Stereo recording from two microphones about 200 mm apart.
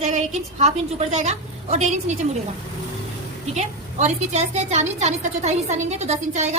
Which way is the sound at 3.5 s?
35° right (ahead or behind).